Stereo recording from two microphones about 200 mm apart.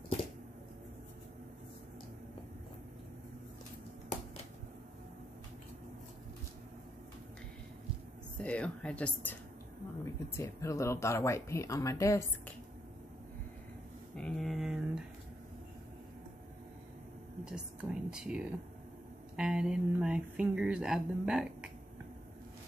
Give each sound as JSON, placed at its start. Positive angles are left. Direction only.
{"t": 8.4, "sound": "speech", "side_deg": 5}
{"t": 10.3, "sound": "speech", "side_deg": 15}
{"t": 14.1, "sound": "a sound", "side_deg": 5}
{"t": 17.5, "sound": "a woman's voice", "side_deg": -5}